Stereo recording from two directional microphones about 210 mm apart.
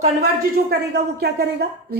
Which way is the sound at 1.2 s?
50° right (ahead or behind).